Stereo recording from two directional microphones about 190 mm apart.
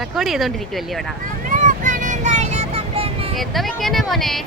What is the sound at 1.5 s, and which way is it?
Vehicle, 40° right (ahead or behind).